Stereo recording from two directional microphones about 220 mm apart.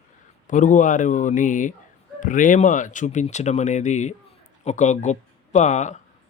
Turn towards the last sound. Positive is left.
turn(degrees=30)  # may be behind; listen again after turning